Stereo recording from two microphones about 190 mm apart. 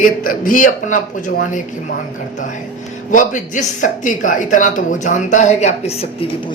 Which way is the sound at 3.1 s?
45° left (ahead or behind).